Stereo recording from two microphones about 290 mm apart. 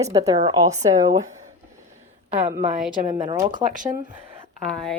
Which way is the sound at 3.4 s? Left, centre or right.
Centre.